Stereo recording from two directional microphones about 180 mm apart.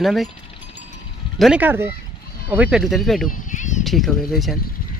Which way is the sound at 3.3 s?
45° left (ahead or behind).